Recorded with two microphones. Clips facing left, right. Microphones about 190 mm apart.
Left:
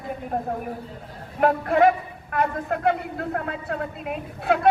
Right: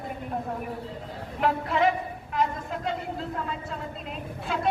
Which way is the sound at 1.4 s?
50° left (ahead or behind).